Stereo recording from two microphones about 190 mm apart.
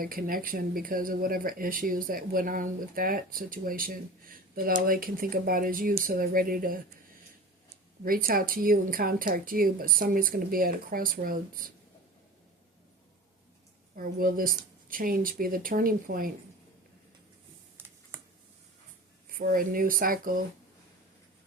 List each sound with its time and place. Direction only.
0.0 s speech: 50° right (ahead or behind)
8.0 s speech: 50° right (ahead or behind)
13.9 s speech: 50° right (ahead or behind)
17.7 s a sound: 10° right (ahead or behind)
19.3 s speech: 50° right (ahead or behind)